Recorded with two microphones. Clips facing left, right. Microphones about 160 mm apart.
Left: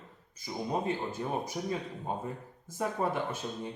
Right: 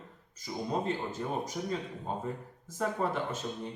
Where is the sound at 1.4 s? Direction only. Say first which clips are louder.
Even; 10° left (ahead or behind).